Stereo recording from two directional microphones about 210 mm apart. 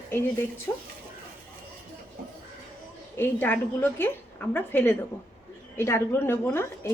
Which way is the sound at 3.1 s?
10° left (ahead or behind).